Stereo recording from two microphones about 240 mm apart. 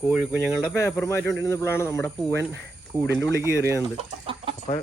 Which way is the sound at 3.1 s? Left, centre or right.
Centre.